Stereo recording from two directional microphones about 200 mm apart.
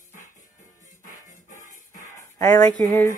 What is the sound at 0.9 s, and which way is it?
Music, 40° left (ahead or behind).